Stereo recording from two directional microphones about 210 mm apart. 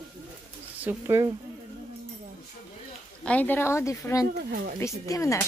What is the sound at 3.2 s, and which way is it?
Speech, 5° left (ahead or behind).